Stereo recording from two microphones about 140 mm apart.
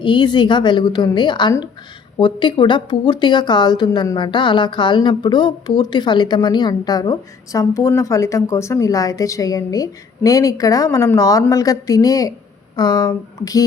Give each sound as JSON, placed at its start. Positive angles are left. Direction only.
{"t": 0.0, "sound": "a woman's voice", "side_deg": 35}